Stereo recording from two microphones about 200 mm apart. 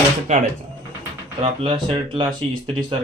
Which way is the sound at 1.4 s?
25° right (ahead or behind).